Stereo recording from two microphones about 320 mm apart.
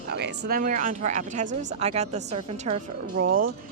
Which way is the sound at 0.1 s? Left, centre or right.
Right.